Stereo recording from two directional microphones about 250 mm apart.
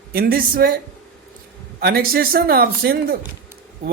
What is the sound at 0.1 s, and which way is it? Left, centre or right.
Speech, right.